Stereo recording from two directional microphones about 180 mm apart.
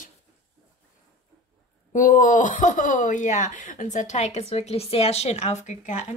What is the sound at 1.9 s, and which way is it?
Speech, 45° left (ahead or behind).